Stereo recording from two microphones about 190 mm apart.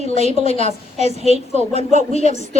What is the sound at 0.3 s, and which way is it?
Speech, 30° left (ahead or behind).